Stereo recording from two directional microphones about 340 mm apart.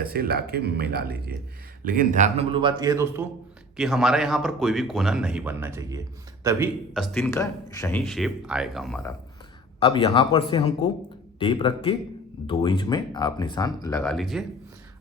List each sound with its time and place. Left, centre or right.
0.0 s a man's voice: right; by 9.1 s centre
9.8 s speech: centre